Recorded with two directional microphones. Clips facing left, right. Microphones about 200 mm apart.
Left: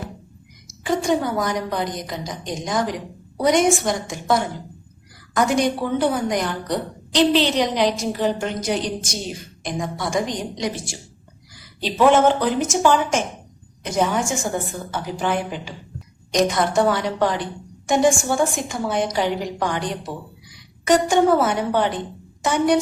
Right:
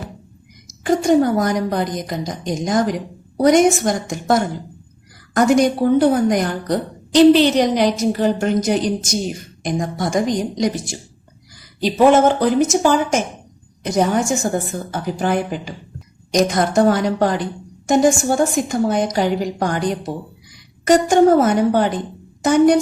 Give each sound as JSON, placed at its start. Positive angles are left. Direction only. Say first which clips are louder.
{"t": 0.9, "sound": "a woman's voice", "louder": "right 6 dB", "side_deg": -45}
{"t": 11.8, "sound": "a woman's voice", "louder": "right 3 dB", "side_deg": -45}